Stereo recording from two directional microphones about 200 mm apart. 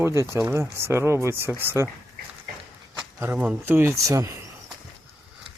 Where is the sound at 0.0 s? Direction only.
15° right (ahead or behind).